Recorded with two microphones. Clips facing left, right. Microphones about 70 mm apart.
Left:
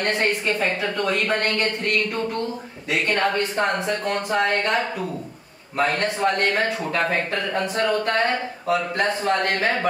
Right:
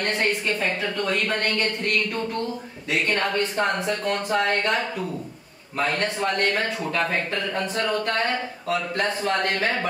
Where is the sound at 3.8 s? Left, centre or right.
Centre.